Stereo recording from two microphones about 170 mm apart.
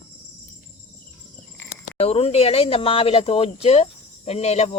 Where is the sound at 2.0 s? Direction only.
35° left (ahead or behind).